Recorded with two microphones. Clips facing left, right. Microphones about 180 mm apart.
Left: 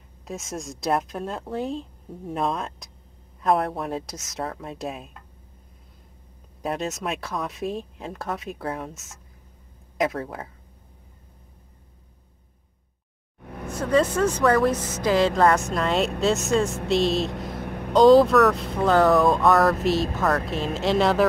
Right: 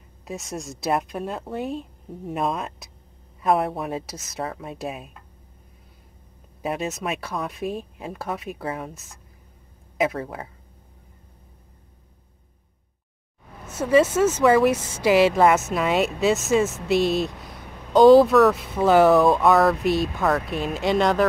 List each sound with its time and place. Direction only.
0.2 s speech: centre (ahead or behind)
6.6 s speech: centre (ahead or behind)
13.7 s speech: 5° right (ahead or behind)
17.4 s vehicle: centre (ahead or behind)
17.6 s vehicle: 60° left (ahead or behind)
17.9 s speech: centre (ahead or behind)